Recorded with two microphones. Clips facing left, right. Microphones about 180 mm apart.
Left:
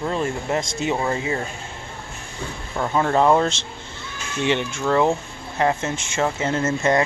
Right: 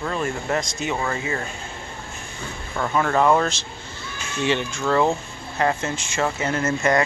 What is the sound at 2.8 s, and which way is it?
Speech, 20° left (ahead or behind).